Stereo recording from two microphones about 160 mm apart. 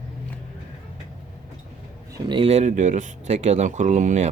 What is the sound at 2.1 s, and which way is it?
Speech, 30° right (ahead or behind).